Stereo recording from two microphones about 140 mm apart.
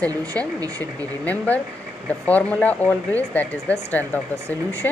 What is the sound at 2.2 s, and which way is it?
Speech, 10° left (ahead or behind).